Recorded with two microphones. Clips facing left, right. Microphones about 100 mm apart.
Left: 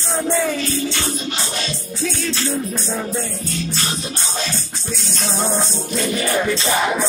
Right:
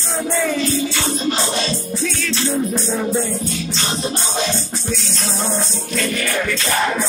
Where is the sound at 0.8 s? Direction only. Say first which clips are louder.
Right 1 dB; 20° right (ahead or behind).